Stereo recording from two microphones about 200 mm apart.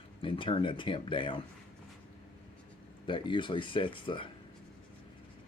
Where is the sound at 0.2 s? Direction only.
25° left (ahead or behind).